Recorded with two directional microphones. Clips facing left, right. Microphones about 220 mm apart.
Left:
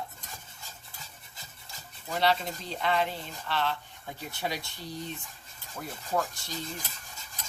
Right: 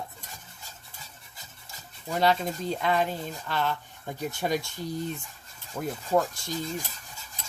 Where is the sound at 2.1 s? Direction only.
45° right (ahead or behind).